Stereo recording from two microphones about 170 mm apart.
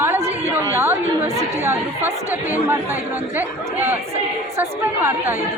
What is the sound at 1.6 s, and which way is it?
A woman's voice, 15° right (ahead or behind).